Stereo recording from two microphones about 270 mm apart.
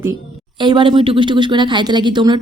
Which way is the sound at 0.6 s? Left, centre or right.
Centre.